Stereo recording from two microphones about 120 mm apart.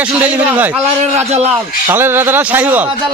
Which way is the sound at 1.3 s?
60° right (ahead or behind).